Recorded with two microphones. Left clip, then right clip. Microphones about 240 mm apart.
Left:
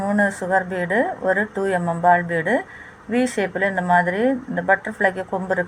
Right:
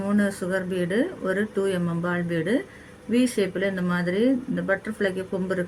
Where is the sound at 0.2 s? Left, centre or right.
Left.